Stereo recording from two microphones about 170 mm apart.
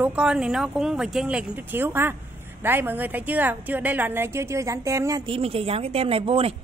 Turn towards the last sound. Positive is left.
turn(degrees=-35)  # may be behind; listen again after turning